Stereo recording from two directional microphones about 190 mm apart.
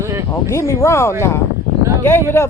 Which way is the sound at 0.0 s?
15° right (ahead or behind).